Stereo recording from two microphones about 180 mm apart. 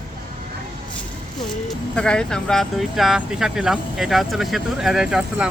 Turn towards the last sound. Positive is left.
turn(degrees=-5)  # may be behind; listen again after turning